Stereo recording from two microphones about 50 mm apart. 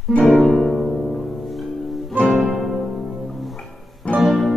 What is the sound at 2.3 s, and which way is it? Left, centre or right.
Music, centre.